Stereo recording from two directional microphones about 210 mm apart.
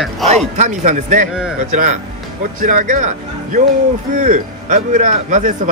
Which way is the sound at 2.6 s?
40° right (ahead or behind).